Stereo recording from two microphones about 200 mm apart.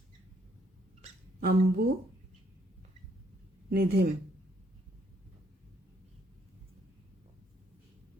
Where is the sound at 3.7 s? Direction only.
50° right (ahead or behind).